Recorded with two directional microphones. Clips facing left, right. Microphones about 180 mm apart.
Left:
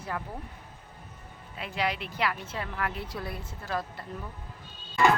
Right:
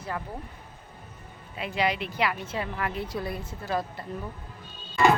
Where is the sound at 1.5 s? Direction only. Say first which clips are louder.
Right 4 dB; centre (ahead or behind).